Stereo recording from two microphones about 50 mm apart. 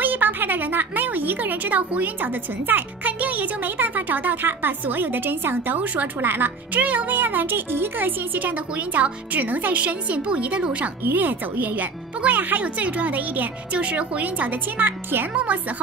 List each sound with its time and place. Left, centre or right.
0.0 s a woman's voice: right
11.1 s speech: right
15.3 s speech: right